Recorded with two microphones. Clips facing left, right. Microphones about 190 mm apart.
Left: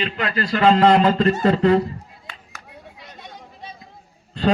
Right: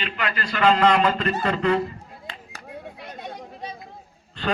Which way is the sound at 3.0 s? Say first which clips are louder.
Right 5 dB; 55° right (ahead or behind).